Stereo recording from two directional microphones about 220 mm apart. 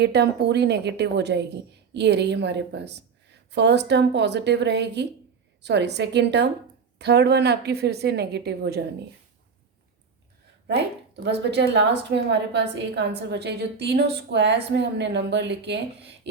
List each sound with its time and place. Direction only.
0.0 s a woman's voice: 50° right (ahead or behind)
10.7 s a woman's voice: 50° right (ahead or behind)